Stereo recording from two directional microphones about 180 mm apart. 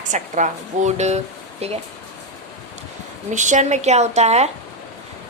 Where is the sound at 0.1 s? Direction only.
45° right (ahead or behind).